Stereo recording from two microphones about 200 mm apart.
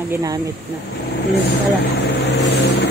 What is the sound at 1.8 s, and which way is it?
Vehicle, 60° left (ahead or behind).